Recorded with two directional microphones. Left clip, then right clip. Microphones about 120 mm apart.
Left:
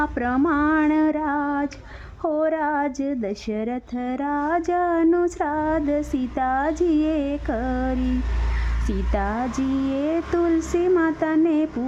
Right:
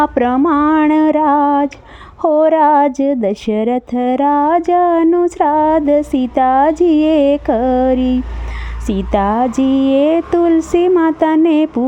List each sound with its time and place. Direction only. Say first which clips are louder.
0.0 s speech: right 11 dB; 60° right (ahead or behind)
0.4 s a sound: right 6 dB; 50° right (ahead or behind)
8.9 s speech: right 11 dB; 55° right (ahead or behind)